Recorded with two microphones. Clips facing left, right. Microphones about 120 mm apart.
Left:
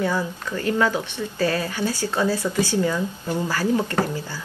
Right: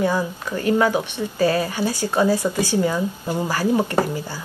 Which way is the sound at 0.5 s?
20° right (ahead or behind).